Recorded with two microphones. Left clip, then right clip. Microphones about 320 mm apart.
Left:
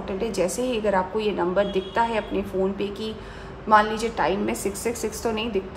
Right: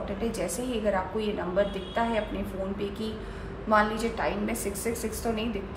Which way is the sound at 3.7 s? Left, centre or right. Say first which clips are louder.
Left 6 dB; left.